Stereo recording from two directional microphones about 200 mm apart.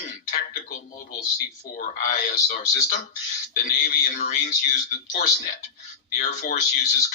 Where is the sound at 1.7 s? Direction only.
40° left (ahead or behind).